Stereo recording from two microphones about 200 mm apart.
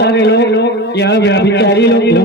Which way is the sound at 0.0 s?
55° left (ahead or behind).